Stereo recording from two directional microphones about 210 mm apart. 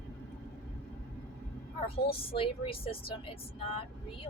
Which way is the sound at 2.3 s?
25° left (ahead or behind).